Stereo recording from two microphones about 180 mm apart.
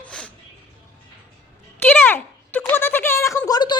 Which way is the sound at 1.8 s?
10° left (ahead or behind).